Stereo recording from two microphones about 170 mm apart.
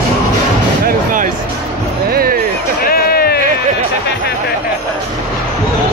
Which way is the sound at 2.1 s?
60° right (ahead or behind).